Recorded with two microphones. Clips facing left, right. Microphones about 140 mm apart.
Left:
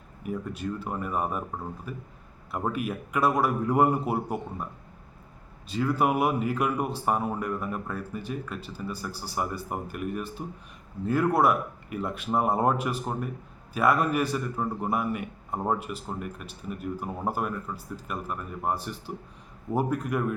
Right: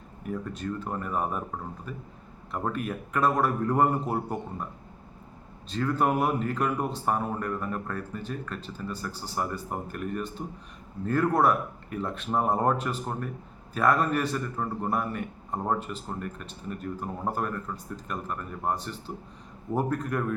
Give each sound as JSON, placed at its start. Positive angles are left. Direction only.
{"t": 0.2, "sound": "a man's voice", "side_deg": 10}
{"t": 5.6, "sound": "a man's voice", "side_deg": 10}